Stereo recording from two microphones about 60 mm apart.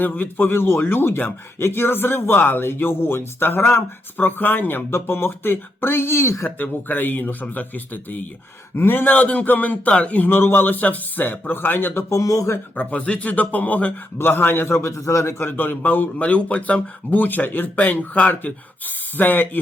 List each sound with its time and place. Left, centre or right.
0.0 s speech: left
4.3 s speech: left
6.6 s speech: left
8.7 s speech: left
9.1 s speech: left
12.1 s speech: left
12.7 s speech: left
14.2 s speech: left
15.4 s speech: left